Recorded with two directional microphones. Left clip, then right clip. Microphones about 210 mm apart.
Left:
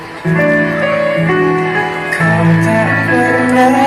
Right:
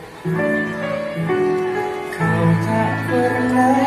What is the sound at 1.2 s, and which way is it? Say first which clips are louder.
Music: left 6 dB; 25° left (ahead or behind).